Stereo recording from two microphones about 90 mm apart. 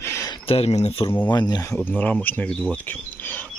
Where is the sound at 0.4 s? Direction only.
90° left.